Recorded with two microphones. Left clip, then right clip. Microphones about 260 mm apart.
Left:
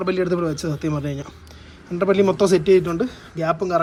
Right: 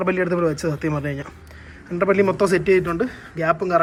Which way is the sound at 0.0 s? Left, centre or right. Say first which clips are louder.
Right 1 dB; centre.